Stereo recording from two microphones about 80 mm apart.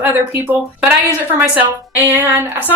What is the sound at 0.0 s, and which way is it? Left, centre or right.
Speech, right.